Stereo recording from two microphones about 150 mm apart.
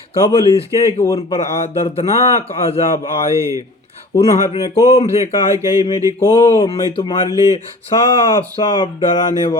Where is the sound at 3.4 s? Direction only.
20° right (ahead or behind).